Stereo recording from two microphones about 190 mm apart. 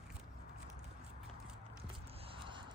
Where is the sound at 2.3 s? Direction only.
25° right (ahead or behind).